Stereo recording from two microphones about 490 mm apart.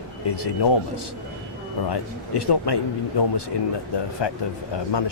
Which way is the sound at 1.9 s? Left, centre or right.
Left.